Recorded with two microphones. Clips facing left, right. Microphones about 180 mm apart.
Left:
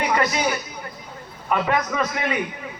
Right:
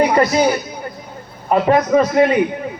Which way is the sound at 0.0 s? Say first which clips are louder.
Right 8 dB; 35° right (ahead or behind).